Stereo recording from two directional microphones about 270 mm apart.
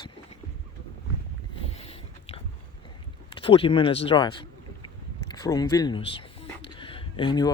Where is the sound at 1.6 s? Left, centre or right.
Left.